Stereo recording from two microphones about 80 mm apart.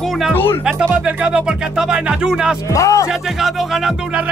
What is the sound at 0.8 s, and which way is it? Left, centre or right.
Speech, centre.